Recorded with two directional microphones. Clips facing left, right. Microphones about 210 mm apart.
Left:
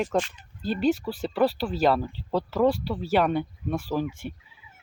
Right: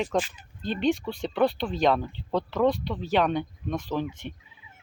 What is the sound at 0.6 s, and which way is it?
Speech, 5° left (ahead or behind).